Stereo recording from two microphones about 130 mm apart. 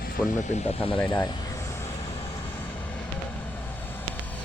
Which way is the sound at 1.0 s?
35° left (ahead or behind).